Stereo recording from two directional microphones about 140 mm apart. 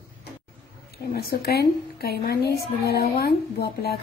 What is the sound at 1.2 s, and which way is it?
A woman's voice, 90° left.